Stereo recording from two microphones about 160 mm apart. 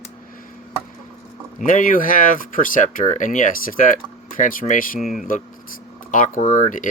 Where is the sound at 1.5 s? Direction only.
55° left (ahead or behind).